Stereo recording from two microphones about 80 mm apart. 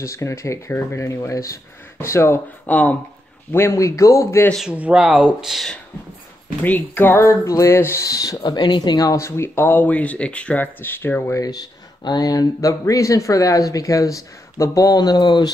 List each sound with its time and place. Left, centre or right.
0.0 s speech: left
2.6 s speech: centre
3.5 s speech: left
4.6 s speech: centre
6.6 s speech: left
12.2 s speech: left